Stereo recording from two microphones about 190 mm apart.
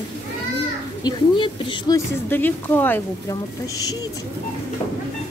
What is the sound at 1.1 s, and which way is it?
Speech, 25° left (ahead or behind).